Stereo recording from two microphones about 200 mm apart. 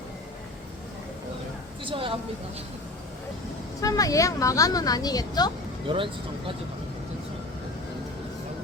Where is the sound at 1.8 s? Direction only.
25° right (ahead or behind).